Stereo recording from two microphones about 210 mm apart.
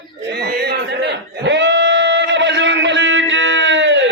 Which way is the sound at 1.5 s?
60° right (ahead or behind).